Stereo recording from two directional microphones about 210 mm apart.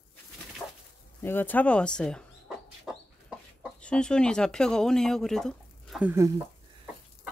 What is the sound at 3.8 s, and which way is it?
Speech, 5° left (ahead or behind).